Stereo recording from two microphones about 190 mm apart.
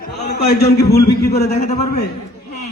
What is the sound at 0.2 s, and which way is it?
A man's voice, 60° left (ahead or behind).